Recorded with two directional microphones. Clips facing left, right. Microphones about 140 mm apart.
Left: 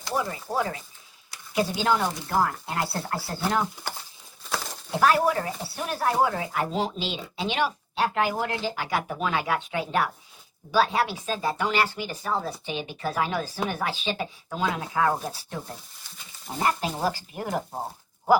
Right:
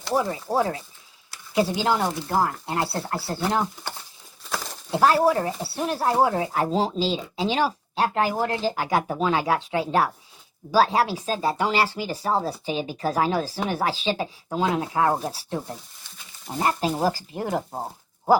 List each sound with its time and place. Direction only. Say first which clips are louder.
0.1 s speech: right 5 dB; 30° right (ahead or behind)
4.4 s a sound: even; centre (ahead or behind)
4.9 s speech: right 3 dB; 25° right (ahead or behind)
16.6 s speech: right 3 dB; 35° right (ahead or behind)